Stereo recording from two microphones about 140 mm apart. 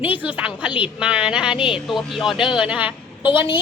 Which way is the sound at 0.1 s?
10° right (ahead or behind).